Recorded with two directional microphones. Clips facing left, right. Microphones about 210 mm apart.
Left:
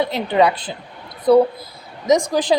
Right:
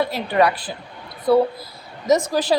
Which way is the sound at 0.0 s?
20° left (ahead or behind).